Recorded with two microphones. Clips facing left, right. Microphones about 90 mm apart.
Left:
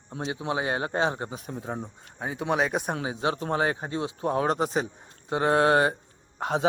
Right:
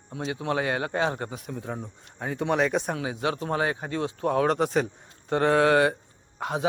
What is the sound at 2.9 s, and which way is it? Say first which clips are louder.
A man's voice: even; 30° left (ahead or behind).